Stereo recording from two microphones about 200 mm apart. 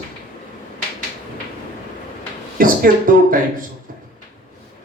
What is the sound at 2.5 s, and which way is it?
Speech, 45° right (ahead or behind).